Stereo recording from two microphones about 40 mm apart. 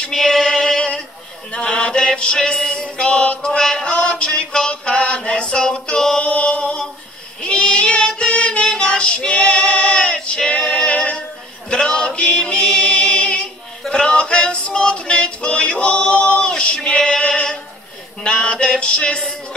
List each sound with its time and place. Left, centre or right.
0.1 s female singing: centre
1.5 s mantra: left
2.3 s chant: centre
6.2 s music: left
7.4 s child singing: left
11.7 s male singing: left
12.2 s music: left
13.8 s singing: left
18.2 s a sound: left